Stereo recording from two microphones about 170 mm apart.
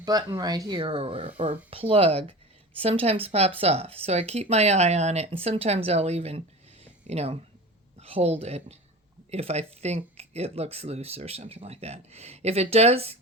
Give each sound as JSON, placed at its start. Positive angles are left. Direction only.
{"t": 0.0, "sound": "speech", "side_deg": -20}